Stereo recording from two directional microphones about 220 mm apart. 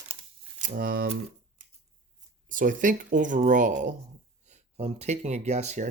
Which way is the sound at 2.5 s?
35° right (ahead or behind).